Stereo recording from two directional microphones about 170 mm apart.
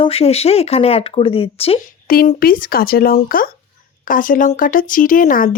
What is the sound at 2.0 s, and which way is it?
Speech, 55° left (ahead or behind).